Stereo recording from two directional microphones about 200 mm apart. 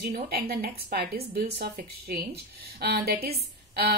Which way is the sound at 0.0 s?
50° right (ahead or behind).